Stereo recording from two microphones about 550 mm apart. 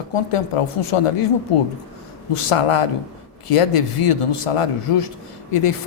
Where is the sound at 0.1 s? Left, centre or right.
Left.